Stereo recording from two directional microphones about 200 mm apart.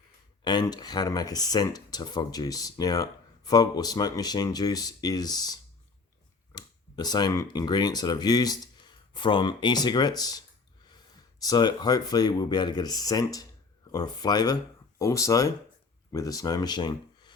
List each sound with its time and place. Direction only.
0.4 s speech: 20° left (ahead or behind)